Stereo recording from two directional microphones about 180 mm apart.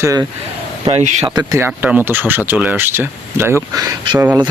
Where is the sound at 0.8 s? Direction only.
35° right (ahead or behind).